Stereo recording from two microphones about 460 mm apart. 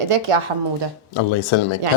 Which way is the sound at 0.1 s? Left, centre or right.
Right.